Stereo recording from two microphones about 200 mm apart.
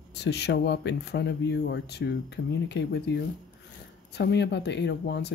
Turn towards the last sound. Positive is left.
turn(degrees=60)  # may be behind; listen again after turning